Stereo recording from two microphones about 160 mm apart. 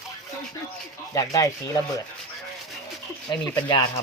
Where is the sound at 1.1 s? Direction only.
20° left (ahead or behind).